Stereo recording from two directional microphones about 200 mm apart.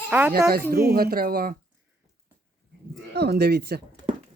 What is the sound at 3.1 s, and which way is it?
Speech, 55° right (ahead or behind).